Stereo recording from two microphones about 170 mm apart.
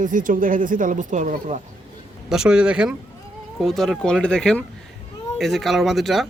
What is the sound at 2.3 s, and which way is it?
Speech, 5° right (ahead or behind).